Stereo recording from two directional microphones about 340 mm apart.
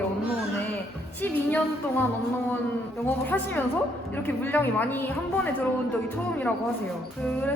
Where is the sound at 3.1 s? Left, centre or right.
Centre.